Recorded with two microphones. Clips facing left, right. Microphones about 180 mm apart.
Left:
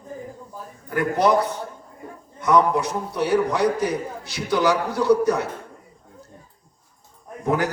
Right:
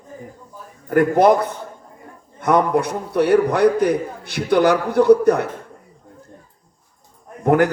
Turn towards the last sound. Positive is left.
turn(degrees=-60)  # may be behind; listen again after turning